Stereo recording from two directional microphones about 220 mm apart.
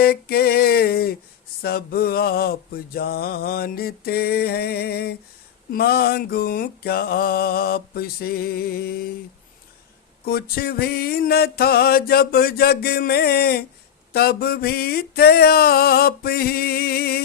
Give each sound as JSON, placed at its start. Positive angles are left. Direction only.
{"t": 0.0, "sound": "a sound", "side_deg": 45}
{"t": 1.6, "sound": "mantra", "side_deg": 45}
{"t": 10.2, "sound": "mantra", "side_deg": 45}